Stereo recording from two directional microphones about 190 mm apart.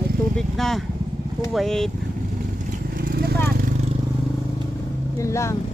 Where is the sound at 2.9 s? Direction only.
50° right (ahead or behind).